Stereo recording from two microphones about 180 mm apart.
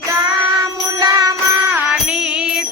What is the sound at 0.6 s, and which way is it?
Music, 20° right (ahead or behind).